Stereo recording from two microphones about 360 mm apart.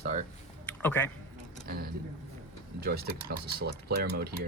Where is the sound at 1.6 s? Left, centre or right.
Right.